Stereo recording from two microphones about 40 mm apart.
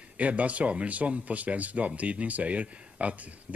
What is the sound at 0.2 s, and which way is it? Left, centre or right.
Speech, right.